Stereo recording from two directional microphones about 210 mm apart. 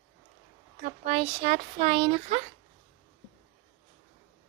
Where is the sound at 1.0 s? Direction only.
30° right (ahead or behind).